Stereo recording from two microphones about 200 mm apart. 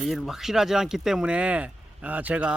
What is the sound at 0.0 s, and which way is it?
Speech, centre (ahead or behind).